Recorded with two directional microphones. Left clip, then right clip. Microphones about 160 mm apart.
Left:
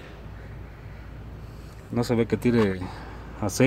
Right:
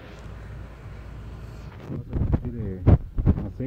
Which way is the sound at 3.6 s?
45° left (ahead or behind).